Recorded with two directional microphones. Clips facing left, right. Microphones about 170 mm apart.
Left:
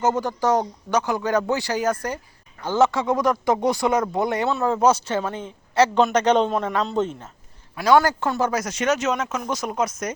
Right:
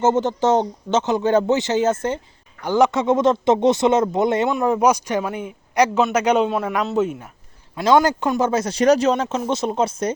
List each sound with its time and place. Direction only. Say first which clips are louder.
0.0 s a man's voice: right 4 dB; 25° right (ahead or behind)
7.8 s a man's voice: right 2 dB; 20° right (ahead or behind)